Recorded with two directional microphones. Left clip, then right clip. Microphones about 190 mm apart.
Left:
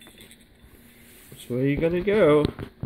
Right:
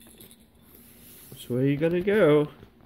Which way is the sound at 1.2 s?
5° right (ahead or behind).